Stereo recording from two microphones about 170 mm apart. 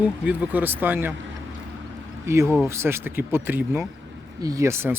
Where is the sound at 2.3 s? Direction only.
15° right (ahead or behind).